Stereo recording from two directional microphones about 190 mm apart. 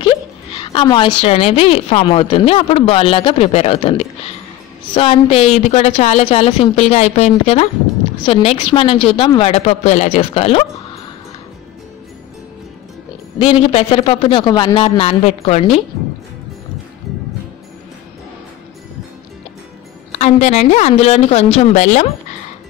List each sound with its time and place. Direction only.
0.5 s a woman's voice: 25° left (ahead or behind)
13.4 s a woman's voice: 30° left (ahead or behind)
17.1 s music: centre (ahead or behind)
20.2 s a woman's voice: 35° left (ahead or behind)